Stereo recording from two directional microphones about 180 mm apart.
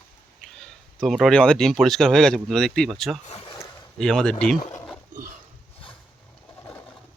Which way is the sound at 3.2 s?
30° left (ahead or behind).